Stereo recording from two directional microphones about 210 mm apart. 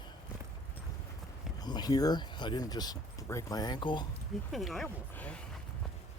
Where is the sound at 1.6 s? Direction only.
20° left (ahead or behind).